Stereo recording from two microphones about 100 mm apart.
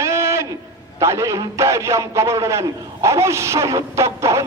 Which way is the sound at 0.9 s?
30° right (ahead or behind).